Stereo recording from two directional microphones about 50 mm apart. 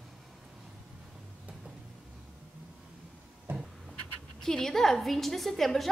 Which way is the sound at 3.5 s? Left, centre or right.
Right.